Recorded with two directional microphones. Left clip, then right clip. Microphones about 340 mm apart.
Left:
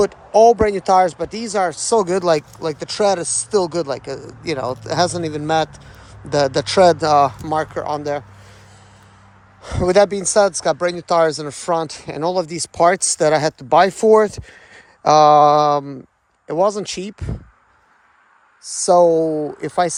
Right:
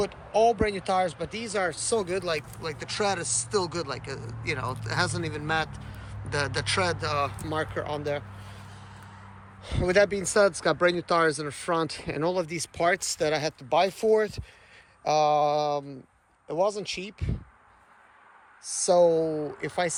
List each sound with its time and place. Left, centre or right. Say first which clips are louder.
0.0 s speech: left 11 dB; left
9.6 s speech: left 9 dB; centre
13.6 s mantra: left 9 dB; left
18.6 s mantra: left 8 dB; left
19.3 s speech: left 9 dB; left
19.6 s mantra: left 10 dB; left